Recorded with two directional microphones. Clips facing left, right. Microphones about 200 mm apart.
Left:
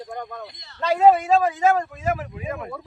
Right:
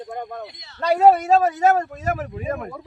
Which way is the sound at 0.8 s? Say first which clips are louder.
Right 1 dB; 40° right (ahead or behind).